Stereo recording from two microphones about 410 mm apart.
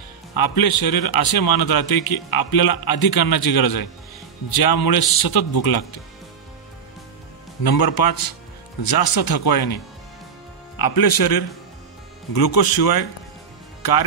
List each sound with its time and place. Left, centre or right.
0.4 s a man's voice: left
7.6 s a man's voice: left
10.8 s a man's voice: left